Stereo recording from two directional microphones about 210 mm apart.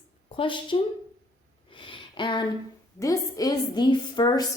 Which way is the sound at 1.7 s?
25° left (ahead or behind).